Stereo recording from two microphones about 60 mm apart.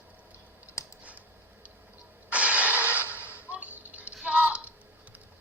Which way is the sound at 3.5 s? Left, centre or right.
Right.